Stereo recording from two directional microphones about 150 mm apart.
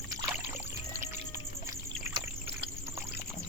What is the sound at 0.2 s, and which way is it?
Rowboat, 15° right (ahead or behind).